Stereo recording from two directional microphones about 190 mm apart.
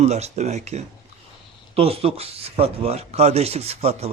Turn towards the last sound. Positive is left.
turn(degrees=-35)  # may be behind; listen again after turning